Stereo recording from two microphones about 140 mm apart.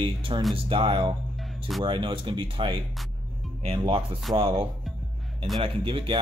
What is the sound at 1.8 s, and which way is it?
Speech, 35° right (ahead or behind).